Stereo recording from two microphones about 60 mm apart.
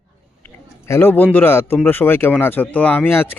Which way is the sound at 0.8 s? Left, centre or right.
Left.